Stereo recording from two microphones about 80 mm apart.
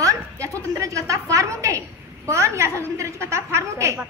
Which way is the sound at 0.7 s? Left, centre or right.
Right.